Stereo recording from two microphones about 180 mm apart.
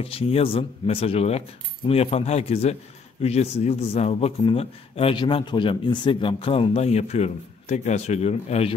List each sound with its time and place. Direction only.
0.0 s a man's voice: 30° left (ahead or behind)